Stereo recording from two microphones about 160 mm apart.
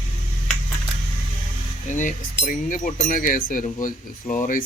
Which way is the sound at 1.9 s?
50° left (ahead or behind).